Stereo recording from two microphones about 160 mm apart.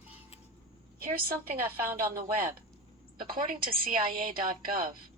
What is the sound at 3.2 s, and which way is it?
A woman's voice, 65° right (ahead or behind).